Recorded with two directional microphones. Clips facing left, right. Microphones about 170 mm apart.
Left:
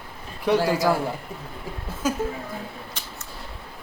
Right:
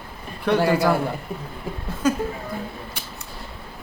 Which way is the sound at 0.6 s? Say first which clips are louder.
Right 3 dB; 60° right (ahead or behind).